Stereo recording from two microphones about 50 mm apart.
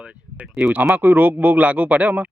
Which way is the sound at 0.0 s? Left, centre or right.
Right.